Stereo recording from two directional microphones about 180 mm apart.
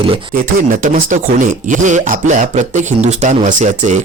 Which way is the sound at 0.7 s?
50° right (ahead or behind).